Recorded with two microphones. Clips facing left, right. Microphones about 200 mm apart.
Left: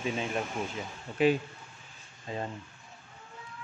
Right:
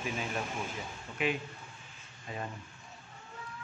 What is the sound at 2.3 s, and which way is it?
Speech, 30° left (ahead or behind).